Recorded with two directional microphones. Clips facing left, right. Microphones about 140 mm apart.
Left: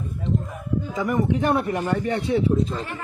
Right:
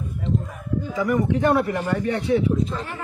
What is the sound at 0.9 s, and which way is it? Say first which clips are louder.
Speech: right 1 dB; 20° left (ahead or behind).